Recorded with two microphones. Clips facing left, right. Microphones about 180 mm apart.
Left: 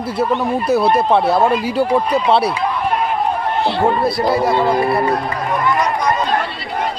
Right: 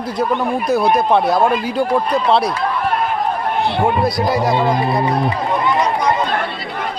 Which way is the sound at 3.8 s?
Centre (ahead or behind).